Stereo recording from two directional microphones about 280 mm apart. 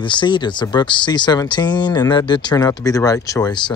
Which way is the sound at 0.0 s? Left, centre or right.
Centre.